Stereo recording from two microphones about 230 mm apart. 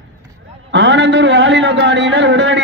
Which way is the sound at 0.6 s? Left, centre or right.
Right.